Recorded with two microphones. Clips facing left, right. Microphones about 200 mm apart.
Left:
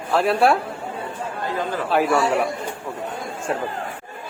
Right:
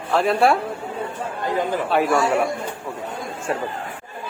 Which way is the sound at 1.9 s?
Centre (ahead or behind).